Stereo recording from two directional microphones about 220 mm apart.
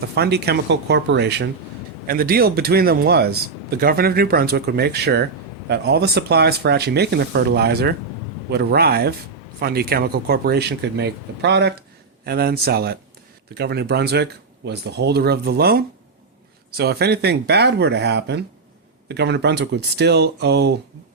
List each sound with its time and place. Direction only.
0.2 s speech: 45° right (ahead or behind)